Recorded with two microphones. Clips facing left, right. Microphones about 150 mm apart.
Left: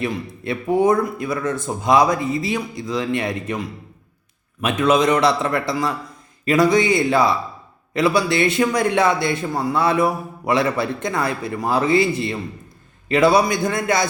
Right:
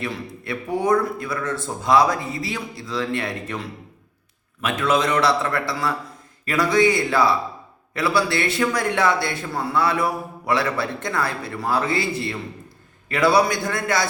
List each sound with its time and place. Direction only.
0.0 s a man's voice: 20° left (ahead or behind)